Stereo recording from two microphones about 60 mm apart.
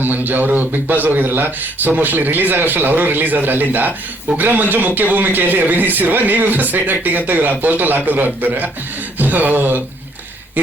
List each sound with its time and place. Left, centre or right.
0.0 s speech: right